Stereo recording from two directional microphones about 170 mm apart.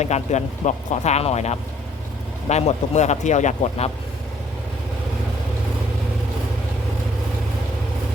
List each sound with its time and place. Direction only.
0.0 s speech: 40° left (ahead or behind)